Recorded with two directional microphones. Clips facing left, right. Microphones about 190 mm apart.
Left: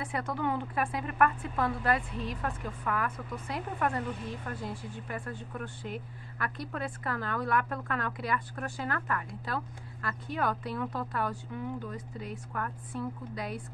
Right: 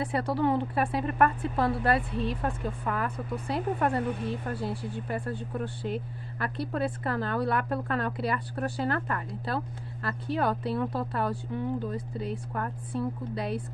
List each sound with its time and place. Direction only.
0.0 s a woman's voice: 35° right (ahead or behind)